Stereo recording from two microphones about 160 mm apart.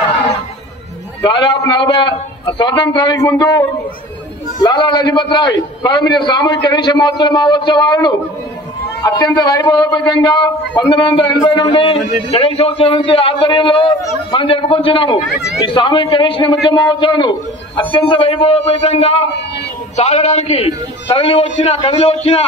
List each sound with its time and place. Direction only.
1.2 s a man's voice: 30° left (ahead or behind)
4.6 s a man's voice: 30° left (ahead or behind)